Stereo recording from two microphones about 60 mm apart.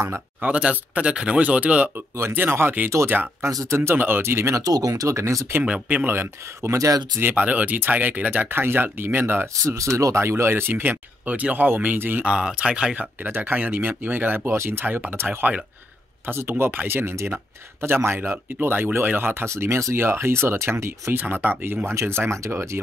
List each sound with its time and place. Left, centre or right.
0.5 s speech: right
2.0 s speech: right
3.7 s speech: right
4.6 s speech: right
5.6 s speech: right
6.0 s speech: right
6.7 s speech: right
7.2 s speech: right
9.5 s speech: right
12.3 s speech: centre; by 21.2 s right
21.2 s speech: right